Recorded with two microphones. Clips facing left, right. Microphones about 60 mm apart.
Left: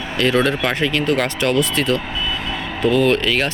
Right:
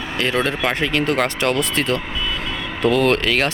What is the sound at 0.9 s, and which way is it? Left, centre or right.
Speech, right.